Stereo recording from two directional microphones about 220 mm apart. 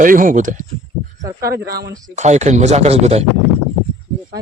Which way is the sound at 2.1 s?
30° right (ahead or behind).